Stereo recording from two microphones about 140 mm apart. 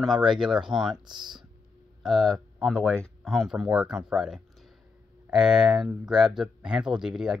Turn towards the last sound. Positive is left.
turn(degrees=-5)  # may be behind; listen again after turning